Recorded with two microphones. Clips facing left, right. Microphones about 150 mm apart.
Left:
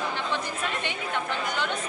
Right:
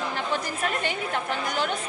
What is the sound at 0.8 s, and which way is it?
Speech, 40° right (ahead or behind).